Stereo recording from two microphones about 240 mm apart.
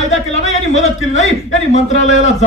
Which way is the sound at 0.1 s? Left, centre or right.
Left.